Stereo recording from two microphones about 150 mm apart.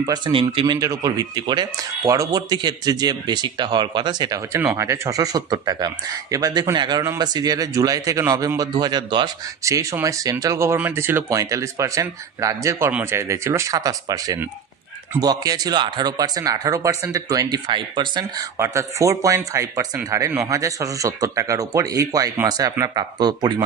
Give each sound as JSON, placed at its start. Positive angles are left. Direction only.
{"t": 0.0, "sound": "a man's voice", "side_deg": -30}
{"t": 4.6, "sound": "a man's voice", "side_deg": -15}